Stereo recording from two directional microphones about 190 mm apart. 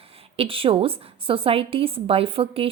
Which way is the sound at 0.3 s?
30° right (ahead or behind).